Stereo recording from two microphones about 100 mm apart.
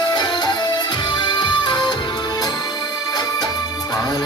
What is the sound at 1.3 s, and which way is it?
Music, 50° left (ahead or behind).